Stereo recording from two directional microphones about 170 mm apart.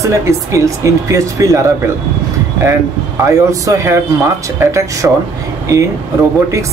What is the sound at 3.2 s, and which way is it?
Speech, 20° right (ahead or behind).